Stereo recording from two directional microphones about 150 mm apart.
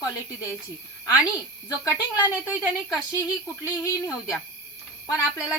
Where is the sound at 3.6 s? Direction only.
20° left (ahead or behind).